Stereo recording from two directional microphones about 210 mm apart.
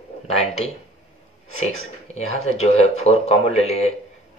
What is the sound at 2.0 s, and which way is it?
Speech, 30° left (ahead or behind).